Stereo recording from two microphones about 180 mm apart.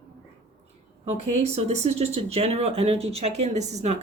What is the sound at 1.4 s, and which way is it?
Speech, 35° right (ahead or behind).